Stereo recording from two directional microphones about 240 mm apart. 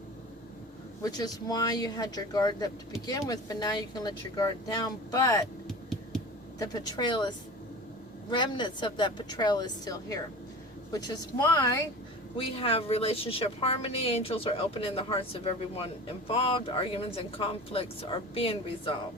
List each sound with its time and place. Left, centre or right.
1.0 s speech: centre
6.6 s speech: centre